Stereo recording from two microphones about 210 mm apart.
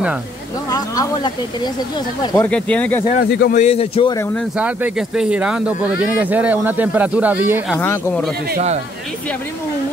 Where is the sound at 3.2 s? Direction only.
50° left (ahead or behind).